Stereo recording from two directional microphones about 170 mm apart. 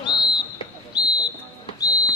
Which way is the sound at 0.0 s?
25° left (ahead or behind).